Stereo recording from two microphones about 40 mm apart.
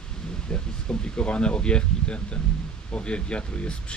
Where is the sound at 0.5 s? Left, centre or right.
Left.